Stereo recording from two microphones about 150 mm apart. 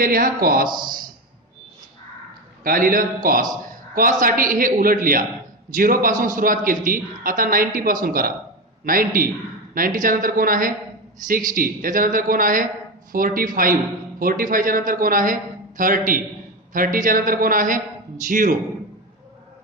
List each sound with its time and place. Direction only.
0.0 s a man's voice: 75° right (ahead or behind)
2.6 s a man's voice: 70° right (ahead or behind)